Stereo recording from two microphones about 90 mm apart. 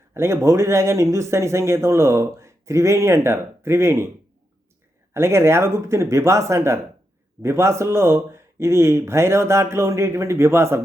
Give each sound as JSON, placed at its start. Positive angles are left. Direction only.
{"t": 0.1, "sound": "speech", "side_deg": -30}
{"t": 5.1, "sound": "speech", "side_deg": -30}